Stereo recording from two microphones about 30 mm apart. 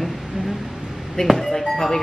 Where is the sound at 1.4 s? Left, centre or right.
Centre.